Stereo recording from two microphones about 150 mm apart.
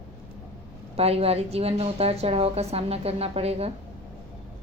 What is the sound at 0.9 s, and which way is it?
A woman's voice, 40° right (ahead or behind).